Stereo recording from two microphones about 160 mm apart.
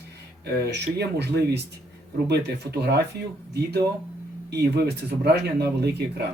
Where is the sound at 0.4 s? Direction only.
90° right.